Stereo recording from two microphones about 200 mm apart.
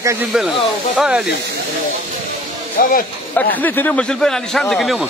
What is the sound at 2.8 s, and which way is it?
Speech, 45° left (ahead or behind).